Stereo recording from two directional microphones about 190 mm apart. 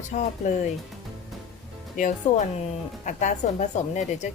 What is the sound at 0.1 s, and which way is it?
Speech, 40° left (ahead or behind).